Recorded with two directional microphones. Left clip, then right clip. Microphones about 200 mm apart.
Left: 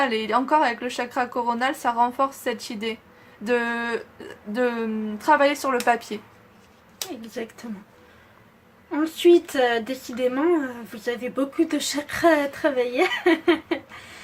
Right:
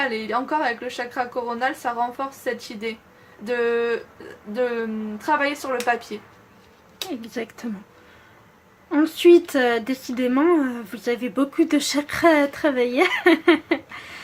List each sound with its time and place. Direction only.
0.1 s speech: 30° left (ahead or behind)
7.2 s speech: 20° right (ahead or behind)
8.9 s speech: 25° right (ahead or behind)